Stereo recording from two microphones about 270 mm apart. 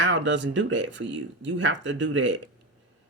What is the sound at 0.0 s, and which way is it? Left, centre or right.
Speech, right.